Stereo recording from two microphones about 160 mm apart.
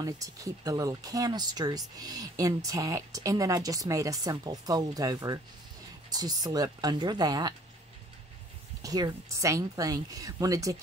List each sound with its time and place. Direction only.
0.0 s speech: 20° right (ahead or behind)
8.8 s speech: 25° right (ahead or behind)